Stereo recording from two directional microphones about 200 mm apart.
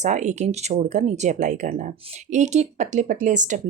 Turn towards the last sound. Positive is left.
turn(degrees=-40)  # may be behind; listen again after turning